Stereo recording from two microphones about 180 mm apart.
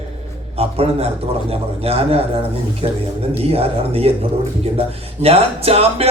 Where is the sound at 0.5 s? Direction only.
35° right (ahead or behind).